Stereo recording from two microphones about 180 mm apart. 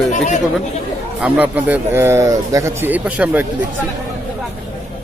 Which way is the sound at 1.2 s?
10° right (ahead or behind).